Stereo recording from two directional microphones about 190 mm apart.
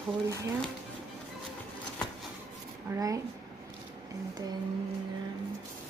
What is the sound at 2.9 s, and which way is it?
Speech, 15° right (ahead or behind).